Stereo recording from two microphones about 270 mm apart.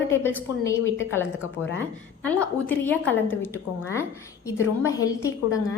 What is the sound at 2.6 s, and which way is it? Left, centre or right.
A woman's voice, centre.